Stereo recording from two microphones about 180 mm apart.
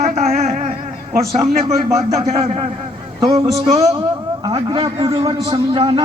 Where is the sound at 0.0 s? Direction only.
40° right (ahead or behind).